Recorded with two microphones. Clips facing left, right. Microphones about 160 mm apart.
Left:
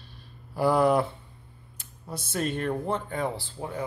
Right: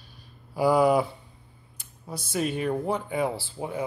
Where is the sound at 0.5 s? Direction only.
5° right (ahead or behind).